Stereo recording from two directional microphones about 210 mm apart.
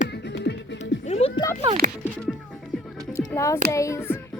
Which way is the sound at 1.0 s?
30° left (ahead or behind).